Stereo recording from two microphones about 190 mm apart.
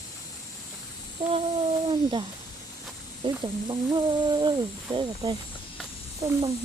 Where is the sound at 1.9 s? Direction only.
25° right (ahead or behind).